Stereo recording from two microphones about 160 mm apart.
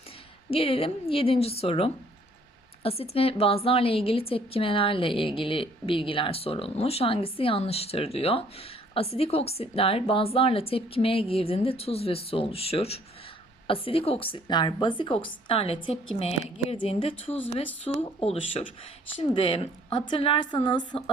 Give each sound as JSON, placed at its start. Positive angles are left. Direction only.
{"t": 0.5, "sound": "a woman's voice", "side_deg": 35}